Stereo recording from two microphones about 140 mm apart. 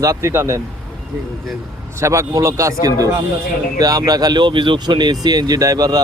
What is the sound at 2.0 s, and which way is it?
Speech, 20° right (ahead or behind).